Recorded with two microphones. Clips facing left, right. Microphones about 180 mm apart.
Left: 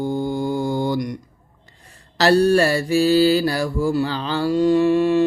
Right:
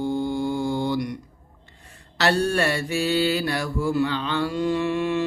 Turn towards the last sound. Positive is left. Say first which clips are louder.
# left 7 dB
turn(degrees=35)  # may be behind; listen again after turning